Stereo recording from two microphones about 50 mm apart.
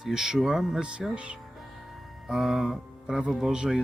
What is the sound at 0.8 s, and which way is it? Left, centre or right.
Speech, centre.